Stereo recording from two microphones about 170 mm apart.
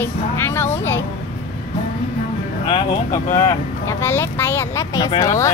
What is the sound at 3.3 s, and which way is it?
Speech, 15° left (ahead or behind).